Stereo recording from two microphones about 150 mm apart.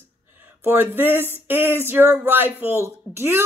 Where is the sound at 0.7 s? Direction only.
15° right (ahead or behind).